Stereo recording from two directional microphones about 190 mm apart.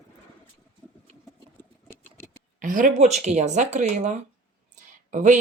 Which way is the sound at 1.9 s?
10° left (ahead or behind).